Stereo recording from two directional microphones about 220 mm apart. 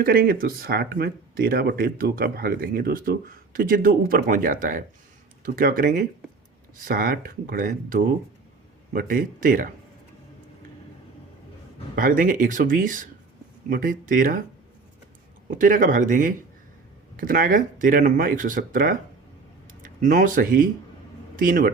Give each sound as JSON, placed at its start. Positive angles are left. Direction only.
{"t": 0.0, "sound": "speech", "side_deg": -40}
{"t": 11.9, "sound": "speech", "side_deg": -40}
{"t": 15.4, "sound": "speech", "side_deg": -40}